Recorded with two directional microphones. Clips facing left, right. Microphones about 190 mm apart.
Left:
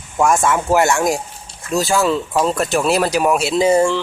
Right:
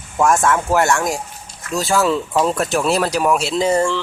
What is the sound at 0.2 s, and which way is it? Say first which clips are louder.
Speech: even; centre (ahead or behind).